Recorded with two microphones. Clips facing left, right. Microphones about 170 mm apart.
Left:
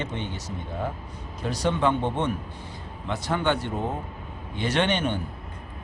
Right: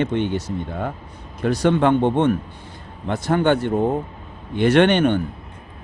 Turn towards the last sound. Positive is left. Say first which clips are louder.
# right 9 dB
turn(degrees=-60)  # may be behind; listen again after turning